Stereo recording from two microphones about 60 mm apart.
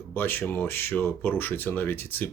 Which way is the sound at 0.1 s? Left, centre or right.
Left.